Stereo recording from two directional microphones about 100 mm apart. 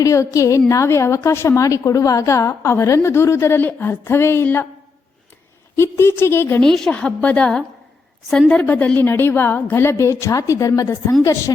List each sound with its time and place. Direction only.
0.0 s a woman's voice: 35° left (ahead or behind)
5.7 s a woman's voice: 25° left (ahead or behind)
6.7 s a woman's voice: 5° left (ahead or behind); by 11.5 s 30° left (ahead or behind)